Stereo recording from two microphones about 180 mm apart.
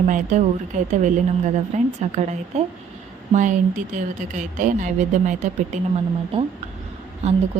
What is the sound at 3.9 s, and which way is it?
Speech, 45° right (ahead or behind).